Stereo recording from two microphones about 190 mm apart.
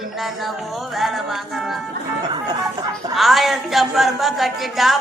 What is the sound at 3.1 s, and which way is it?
A woman's voice, centre (ahead or behind).